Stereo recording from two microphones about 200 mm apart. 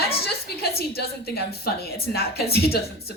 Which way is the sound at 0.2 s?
50° left (ahead or behind).